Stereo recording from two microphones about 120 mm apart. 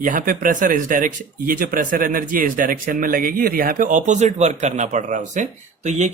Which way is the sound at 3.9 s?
80° right.